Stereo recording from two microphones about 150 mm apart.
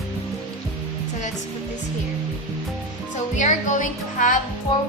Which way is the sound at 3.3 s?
55° left (ahead or behind).